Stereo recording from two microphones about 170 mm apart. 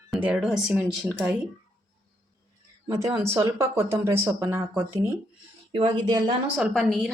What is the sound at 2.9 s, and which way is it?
A woman's voice, 20° right (ahead or behind).